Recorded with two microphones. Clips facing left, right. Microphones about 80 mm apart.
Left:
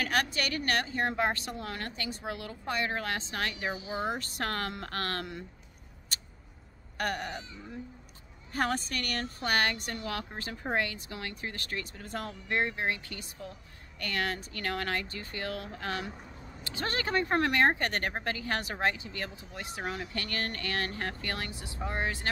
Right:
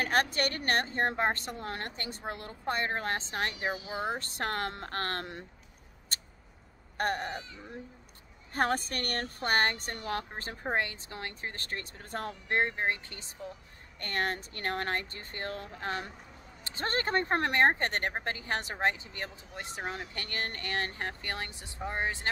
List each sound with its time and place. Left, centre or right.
0.0 s speech: right
7.0 s speech: right
8.5 s speech: right